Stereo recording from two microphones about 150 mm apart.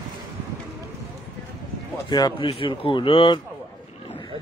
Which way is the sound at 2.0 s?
30° left (ahead or behind).